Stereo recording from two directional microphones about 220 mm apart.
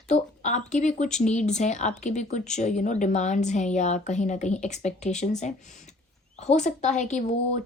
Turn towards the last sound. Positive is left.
turn(degrees=35)  # may be behind; listen again after turning